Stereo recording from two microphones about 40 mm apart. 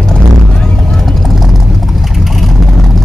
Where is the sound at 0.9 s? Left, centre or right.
Centre.